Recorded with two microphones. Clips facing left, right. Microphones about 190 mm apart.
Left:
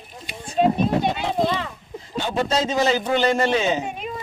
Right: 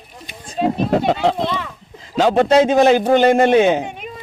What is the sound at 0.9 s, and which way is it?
A man's voice, 90° right.